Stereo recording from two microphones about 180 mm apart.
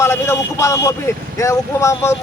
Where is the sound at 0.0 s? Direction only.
15° left (ahead or behind).